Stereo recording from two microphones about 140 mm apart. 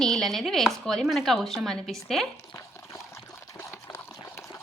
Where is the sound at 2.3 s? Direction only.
20° left (ahead or behind).